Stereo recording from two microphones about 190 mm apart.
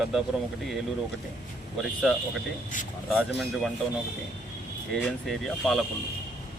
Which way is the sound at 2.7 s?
45° left (ahead or behind).